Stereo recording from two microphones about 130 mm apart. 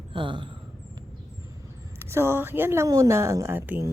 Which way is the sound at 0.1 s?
40° right (ahead or behind).